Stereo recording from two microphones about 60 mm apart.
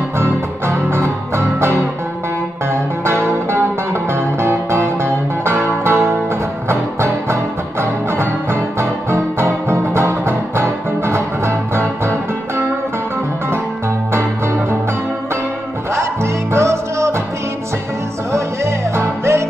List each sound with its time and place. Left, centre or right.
0.2 s music: right
14.1 s music: right
16.5 s music: right
18.3 s music: right